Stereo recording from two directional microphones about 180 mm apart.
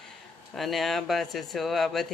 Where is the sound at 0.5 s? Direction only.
Centre (ahead or behind).